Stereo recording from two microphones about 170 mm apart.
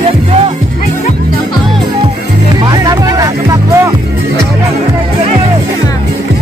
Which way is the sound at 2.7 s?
20° right (ahead or behind).